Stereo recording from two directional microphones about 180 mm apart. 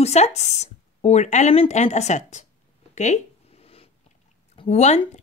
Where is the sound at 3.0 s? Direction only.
35° left (ahead or behind).